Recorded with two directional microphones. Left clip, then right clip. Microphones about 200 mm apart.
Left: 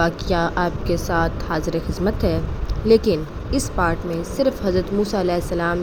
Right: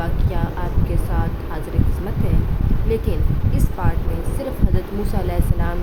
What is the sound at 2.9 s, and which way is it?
A woman's voice, 25° left (ahead or behind).